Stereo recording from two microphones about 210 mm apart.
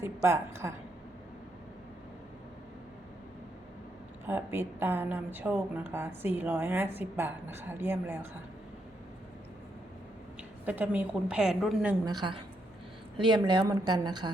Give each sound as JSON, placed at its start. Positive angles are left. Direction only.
{"t": 0.0, "sound": "a woman's voice", "side_deg": -15}
{"t": 4.3, "sound": "a woman's voice", "side_deg": -10}
{"t": 10.7, "sound": "a woman's voice", "side_deg": -5}
{"t": 12.0, "sound": "a woman's voice", "side_deg": -20}